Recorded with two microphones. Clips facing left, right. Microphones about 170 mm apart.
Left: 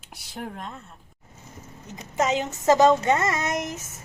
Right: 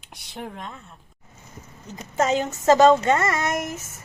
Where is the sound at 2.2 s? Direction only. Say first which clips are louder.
Right 2 dB; 15° left (ahead or behind).